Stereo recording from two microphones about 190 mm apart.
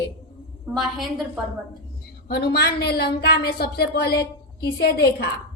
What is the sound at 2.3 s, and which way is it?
A woman's voice, 55° left (ahead or behind).